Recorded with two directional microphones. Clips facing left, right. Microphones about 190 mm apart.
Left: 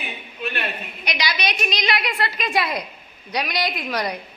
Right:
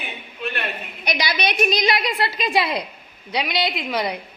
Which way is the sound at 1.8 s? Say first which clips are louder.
Right 3 dB; 30° right (ahead or behind).